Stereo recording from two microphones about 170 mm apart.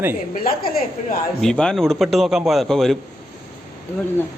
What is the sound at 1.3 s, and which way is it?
Speech, 5° left (ahead or behind).